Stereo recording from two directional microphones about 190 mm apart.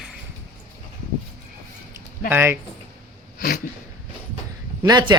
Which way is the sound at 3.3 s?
50° left (ahead or behind).